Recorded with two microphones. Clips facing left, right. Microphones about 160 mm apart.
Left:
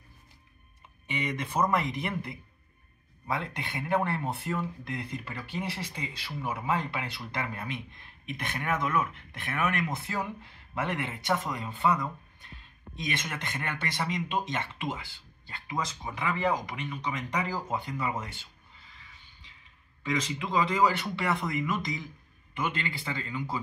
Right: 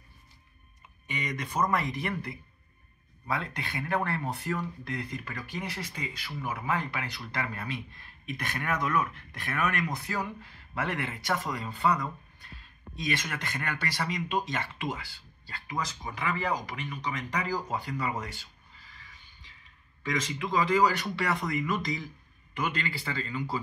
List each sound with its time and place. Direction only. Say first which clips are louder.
1.1 s speech: left 2 dB; 25° left (ahead or behind)